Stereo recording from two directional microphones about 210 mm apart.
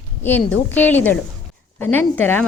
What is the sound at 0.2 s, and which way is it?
A woman's voice, 10° left (ahead or behind).